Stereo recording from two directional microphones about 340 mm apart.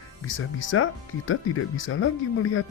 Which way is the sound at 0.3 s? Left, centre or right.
Left.